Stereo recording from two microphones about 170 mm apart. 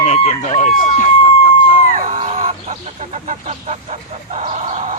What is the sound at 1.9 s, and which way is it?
Fowl, 40° right (ahead or behind).